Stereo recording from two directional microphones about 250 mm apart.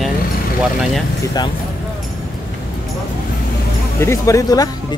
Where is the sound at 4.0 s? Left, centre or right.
Centre.